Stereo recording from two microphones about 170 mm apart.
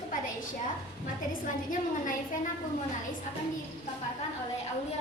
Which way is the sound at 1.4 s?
50° left (ahead or behind).